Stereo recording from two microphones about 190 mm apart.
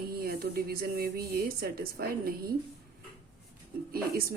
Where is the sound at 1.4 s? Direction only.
55° right (ahead or behind).